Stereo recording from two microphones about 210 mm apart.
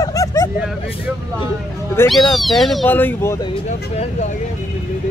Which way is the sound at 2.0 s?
Centre (ahead or behind).